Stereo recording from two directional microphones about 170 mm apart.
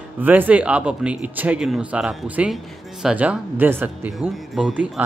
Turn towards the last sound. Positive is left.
turn(degrees=-5)  # may be behind; listen again after turning